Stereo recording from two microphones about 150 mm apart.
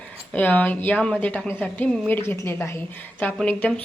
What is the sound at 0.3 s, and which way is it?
A woman's voice, 10° left (ahead or behind).